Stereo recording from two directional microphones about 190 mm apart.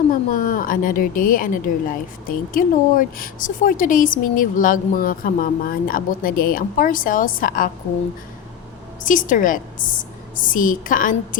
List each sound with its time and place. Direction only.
0.1 s speech: 45° left (ahead or behind)
9.0 s speech: 45° left (ahead or behind)